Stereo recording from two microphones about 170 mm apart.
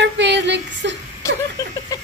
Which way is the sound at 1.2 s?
15° left (ahead or behind).